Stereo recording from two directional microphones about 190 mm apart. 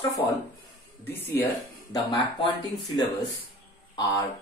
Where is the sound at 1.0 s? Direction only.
15° left (ahead or behind).